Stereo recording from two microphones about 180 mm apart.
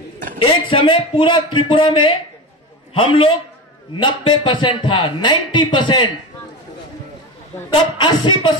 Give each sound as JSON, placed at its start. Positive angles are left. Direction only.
{"t": 0.4, "sound": "a man's voice", "side_deg": 30}
{"t": 8.0, "sound": "a man's voice", "side_deg": 25}